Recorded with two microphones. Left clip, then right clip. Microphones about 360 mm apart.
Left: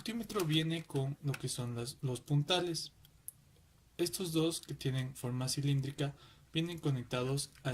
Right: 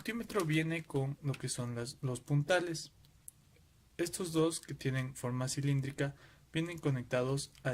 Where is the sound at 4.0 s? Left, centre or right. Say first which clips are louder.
Right 1 dB; centre.